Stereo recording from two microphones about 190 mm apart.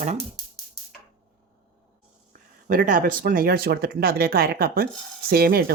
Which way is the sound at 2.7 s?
45° right (ahead or behind).